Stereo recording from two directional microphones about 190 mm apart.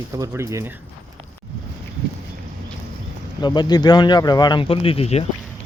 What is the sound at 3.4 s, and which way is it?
Speech, 25° left (ahead or behind).